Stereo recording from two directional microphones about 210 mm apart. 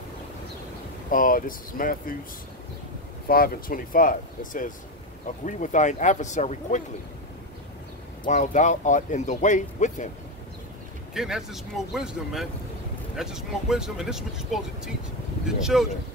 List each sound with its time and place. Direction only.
1.1 s speech: 40° left (ahead or behind)
3.3 s speech: 45° left (ahead or behind)
8.3 s speech: 35° left (ahead or behind)
11.1 s speech: centre (ahead or behind)